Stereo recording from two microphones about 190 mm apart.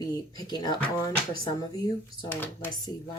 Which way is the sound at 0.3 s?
20° left (ahead or behind).